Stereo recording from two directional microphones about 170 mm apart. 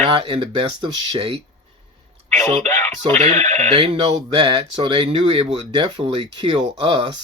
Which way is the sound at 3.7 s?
35° right (ahead or behind).